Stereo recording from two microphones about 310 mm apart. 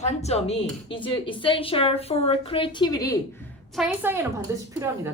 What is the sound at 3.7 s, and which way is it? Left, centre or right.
Speech, centre.